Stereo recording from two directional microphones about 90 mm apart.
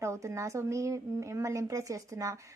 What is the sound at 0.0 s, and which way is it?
A woman's voice, 35° right (ahead or behind).